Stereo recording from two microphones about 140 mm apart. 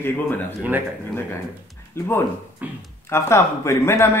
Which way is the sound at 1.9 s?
15° left (ahead or behind).